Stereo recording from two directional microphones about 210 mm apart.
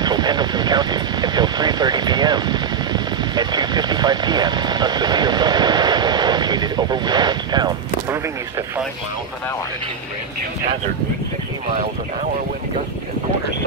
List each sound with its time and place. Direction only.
0.0 s speech: 20° right (ahead or behind)